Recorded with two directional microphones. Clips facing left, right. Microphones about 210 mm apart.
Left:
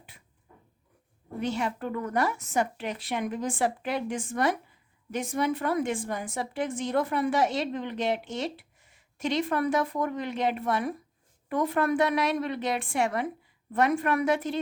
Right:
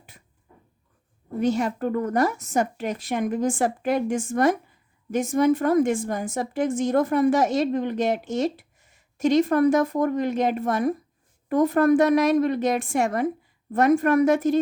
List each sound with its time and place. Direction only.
1.4 s a woman's voice: 45° right (ahead or behind)